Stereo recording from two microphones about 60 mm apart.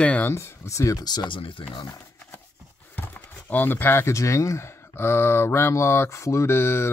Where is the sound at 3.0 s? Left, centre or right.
Left.